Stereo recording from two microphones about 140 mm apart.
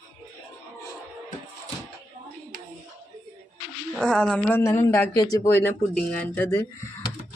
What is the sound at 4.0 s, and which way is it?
Speech, 5° left (ahead or behind).